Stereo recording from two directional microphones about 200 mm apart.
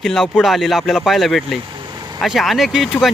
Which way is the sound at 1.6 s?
20° right (ahead or behind).